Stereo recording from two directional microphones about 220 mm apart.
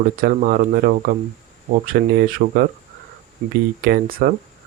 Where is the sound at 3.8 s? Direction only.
40° right (ahead or behind).